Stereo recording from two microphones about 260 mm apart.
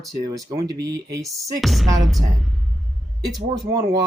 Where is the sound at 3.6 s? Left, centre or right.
Centre.